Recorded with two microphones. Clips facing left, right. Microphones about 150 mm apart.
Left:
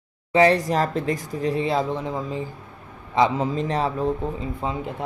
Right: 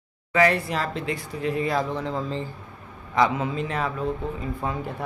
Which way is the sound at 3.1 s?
30° left (ahead or behind).